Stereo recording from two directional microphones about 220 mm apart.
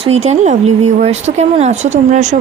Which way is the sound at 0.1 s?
30° right (ahead or behind).